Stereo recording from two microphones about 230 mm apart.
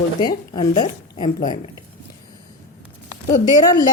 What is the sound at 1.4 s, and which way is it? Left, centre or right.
Speech, left.